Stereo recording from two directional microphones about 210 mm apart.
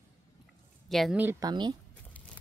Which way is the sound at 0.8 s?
Centre (ahead or behind).